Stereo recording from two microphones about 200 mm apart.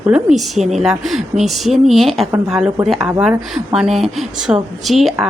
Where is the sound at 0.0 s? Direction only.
5° right (ahead or behind).